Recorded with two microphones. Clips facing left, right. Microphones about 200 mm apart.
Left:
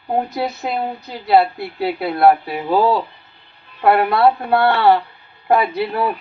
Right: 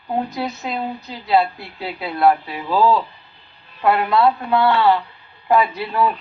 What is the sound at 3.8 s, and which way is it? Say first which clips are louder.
A woman's voice: left 2 dB; 60° left (ahead or behind).